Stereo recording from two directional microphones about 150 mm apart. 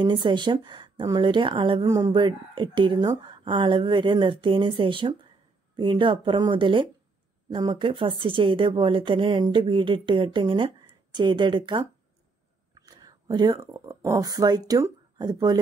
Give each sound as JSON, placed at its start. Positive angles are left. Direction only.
{"t": 0.0, "sound": "speech", "side_deg": -30}